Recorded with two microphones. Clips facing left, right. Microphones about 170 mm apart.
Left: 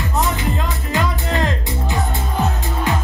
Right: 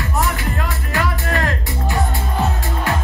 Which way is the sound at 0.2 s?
20° left (ahead or behind).